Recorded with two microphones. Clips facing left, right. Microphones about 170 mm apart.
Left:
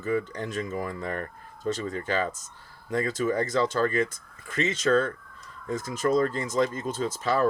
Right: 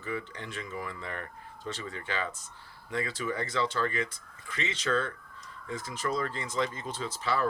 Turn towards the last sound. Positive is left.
turn(degrees=45)  # may be behind; listen again after turning